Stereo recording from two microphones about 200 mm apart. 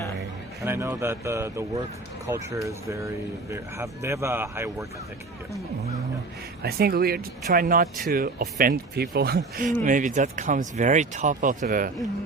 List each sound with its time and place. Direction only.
0.6 s speech: 10° right (ahead or behind)
6.6 s speech: 50° right (ahead or behind)
9.8 s speech: 40° right (ahead or behind)